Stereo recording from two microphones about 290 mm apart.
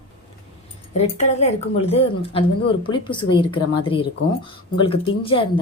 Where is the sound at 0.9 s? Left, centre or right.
Left.